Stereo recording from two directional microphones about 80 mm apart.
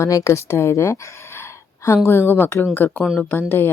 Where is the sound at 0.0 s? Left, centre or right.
Left.